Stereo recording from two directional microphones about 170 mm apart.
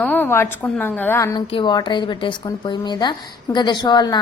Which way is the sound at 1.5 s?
25° left (ahead or behind).